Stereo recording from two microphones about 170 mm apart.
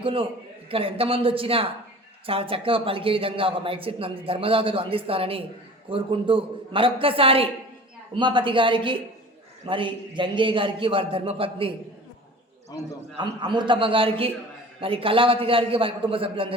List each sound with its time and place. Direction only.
0.0 s speech: 30° right (ahead or behind)
13.1 s speech: 25° right (ahead or behind)